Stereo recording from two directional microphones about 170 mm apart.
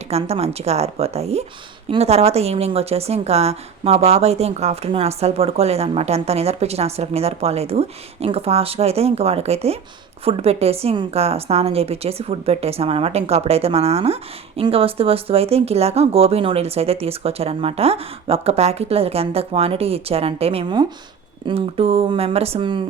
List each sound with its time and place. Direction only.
0.1 s a woman's voice: 40° right (ahead or behind)